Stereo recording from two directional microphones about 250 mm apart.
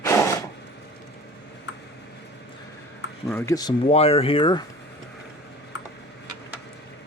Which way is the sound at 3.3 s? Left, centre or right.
Centre.